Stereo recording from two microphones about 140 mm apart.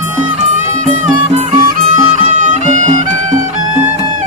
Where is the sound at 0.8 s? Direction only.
55° right (ahead or behind).